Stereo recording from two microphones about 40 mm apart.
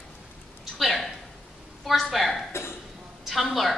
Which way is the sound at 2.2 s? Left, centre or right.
Centre.